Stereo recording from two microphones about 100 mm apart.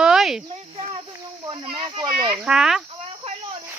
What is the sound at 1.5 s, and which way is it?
Speech, 55° right (ahead or behind).